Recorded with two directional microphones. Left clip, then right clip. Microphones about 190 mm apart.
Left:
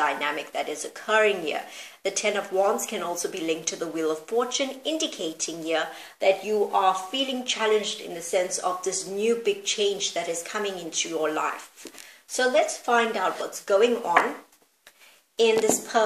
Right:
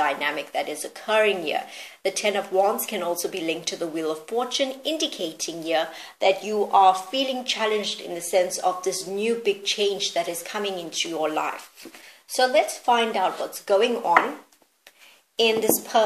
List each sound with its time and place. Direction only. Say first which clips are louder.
0.0 s speech: right 1 dB; 35° right (ahead or behind)
15.3 s speech: even; 35° right (ahead or behind)